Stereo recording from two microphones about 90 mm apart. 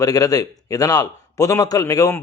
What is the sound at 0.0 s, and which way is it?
A man's voice, 40° left (ahead or behind).